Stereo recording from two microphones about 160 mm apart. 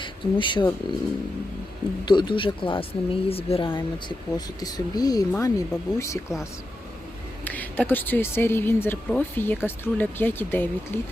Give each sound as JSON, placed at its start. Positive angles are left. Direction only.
{"t": 0.0, "sound": "speech", "side_deg": 30}
{"t": 2.0, "sound": "a woman's voice", "side_deg": 30}